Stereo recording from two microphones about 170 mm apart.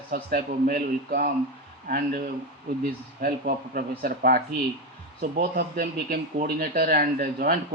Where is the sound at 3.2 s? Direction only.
60° right (ahead or behind).